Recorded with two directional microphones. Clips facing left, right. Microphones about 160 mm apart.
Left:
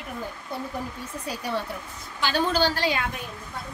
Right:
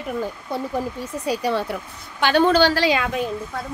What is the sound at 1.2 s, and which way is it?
Speech, 90° right.